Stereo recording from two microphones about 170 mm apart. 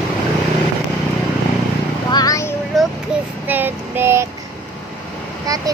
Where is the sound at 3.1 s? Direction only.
5° right (ahead or behind).